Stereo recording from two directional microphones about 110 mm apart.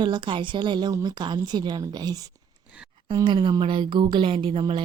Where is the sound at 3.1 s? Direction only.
45° right (ahead or behind).